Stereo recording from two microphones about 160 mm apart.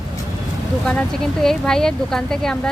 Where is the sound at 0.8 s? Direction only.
5° left (ahead or behind).